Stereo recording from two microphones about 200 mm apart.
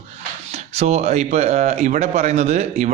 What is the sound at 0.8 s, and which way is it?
Speech, 35° right (ahead or behind).